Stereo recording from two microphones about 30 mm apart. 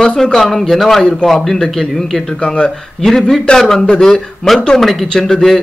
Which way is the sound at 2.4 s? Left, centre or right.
Left.